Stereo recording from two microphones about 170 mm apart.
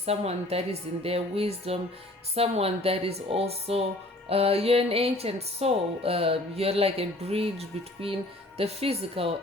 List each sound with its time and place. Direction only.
0.0 s speech: 35° right (ahead or behind)